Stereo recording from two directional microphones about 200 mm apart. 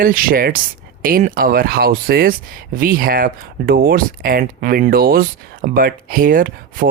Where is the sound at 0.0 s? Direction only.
45° right (ahead or behind).